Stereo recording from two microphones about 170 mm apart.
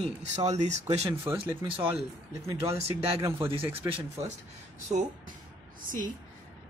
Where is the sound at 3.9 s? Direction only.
40° right (ahead or behind).